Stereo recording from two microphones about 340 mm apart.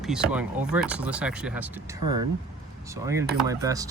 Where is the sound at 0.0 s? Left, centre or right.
Centre.